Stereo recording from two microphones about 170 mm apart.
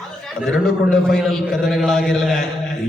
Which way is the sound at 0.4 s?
5° left (ahead or behind).